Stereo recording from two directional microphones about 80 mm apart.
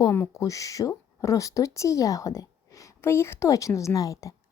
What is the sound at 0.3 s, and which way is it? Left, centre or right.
Speech, left.